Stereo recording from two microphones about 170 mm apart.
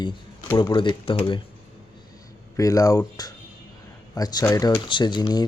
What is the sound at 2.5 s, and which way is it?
Speech, 20° left (ahead or behind).